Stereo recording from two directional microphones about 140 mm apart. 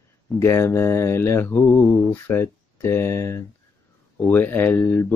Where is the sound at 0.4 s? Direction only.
20° left (ahead or behind).